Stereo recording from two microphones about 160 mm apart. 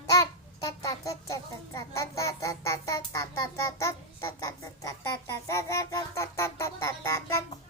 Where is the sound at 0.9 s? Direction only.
20° left (ahead or behind).